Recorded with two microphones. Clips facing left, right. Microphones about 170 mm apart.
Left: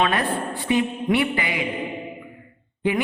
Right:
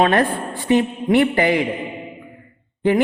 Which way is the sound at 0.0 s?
45° right (ahead or behind).